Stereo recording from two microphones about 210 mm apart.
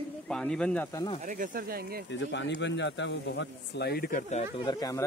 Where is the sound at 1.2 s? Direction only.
40° right (ahead or behind).